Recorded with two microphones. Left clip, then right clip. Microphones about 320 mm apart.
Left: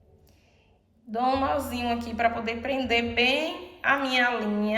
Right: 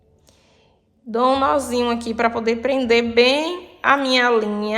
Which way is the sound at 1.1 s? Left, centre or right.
Centre.